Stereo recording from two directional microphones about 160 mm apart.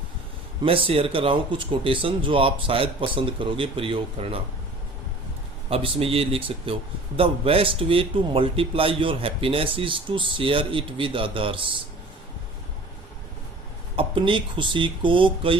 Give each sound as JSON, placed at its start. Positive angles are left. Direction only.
{"t": 0.6, "sound": "a man's voice", "side_deg": -35}
{"t": 5.7, "sound": "a man's voice", "side_deg": -35}
{"t": 13.9, "sound": "a man's voice", "side_deg": -35}